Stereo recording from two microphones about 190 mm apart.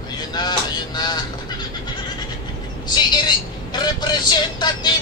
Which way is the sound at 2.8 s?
20° left (ahead or behind).